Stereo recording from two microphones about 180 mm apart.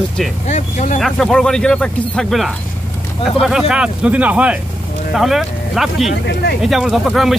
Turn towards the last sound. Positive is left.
turn(degrees=0)  # may be behind; listen again after turning